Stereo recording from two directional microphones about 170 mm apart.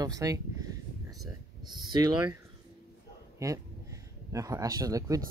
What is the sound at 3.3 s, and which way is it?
Speech, 20° right (ahead or behind).